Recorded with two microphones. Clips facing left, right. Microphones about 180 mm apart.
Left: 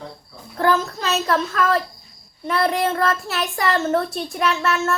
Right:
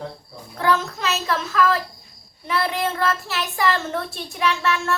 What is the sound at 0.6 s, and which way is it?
Child singing, 35° left (ahead or behind).